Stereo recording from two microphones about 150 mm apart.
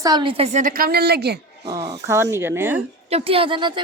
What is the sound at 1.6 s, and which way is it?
A woman's voice, 20° right (ahead or behind).